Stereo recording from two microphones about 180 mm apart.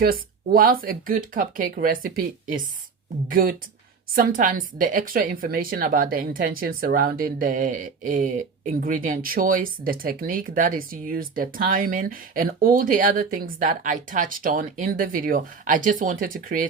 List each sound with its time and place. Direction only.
0.0 s a woman's voice: 55° right (ahead or behind)